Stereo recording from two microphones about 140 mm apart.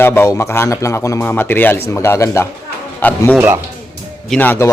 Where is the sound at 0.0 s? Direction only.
15° left (ahead or behind).